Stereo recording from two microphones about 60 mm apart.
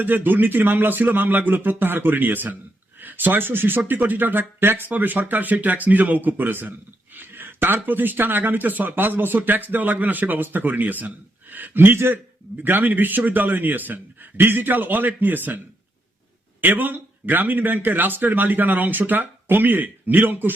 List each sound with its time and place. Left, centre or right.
0.0 s speech: right